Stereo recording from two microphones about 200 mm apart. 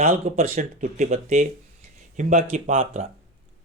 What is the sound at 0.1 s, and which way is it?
Speech, 35° right (ahead or behind).